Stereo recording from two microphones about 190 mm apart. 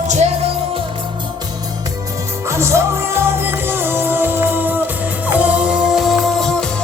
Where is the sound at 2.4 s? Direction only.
15° right (ahead or behind).